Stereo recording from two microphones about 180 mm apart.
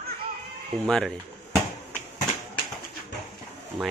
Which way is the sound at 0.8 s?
5° left (ahead or behind).